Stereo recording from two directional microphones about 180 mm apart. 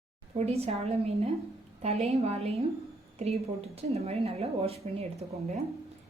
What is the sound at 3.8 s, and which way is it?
Speech, 35° right (ahead or behind).